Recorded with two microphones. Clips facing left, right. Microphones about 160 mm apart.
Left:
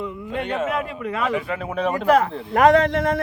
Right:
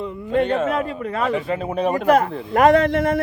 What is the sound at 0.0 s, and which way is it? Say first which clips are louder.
A man's voice: right 7 dB; 30° right (ahead or behind).